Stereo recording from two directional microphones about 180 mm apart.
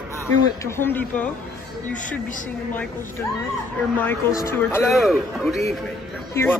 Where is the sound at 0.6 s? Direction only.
15° left (ahead or behind).